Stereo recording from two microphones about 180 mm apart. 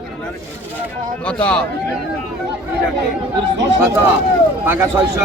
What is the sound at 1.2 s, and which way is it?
Speech, 5° left (ahead or behind).